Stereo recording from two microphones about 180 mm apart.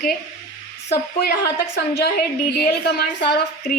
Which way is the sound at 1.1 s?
60° left (ahead or behind).